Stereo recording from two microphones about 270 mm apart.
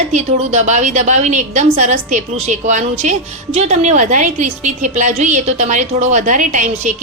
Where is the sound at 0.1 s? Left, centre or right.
Right.